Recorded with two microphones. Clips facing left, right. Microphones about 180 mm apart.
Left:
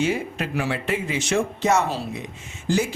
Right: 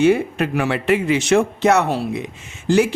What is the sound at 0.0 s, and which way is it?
A man's voice, 60° right (ahead or behind).